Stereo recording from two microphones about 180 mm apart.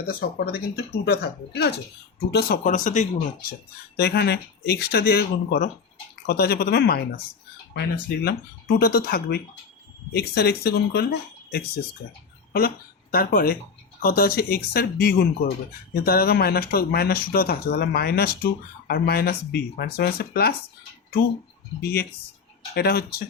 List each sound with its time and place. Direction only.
0.0 s speech: 55° left (ahead or behind)
3.9 s speech: 65° left (ahead or behind)
21.8 s speech: 60° left (ahead or behind)